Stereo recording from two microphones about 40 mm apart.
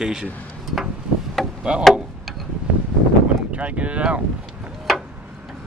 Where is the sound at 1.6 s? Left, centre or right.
Right.